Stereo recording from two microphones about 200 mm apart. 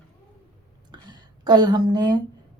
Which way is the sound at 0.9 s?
20° right (ahead or behind).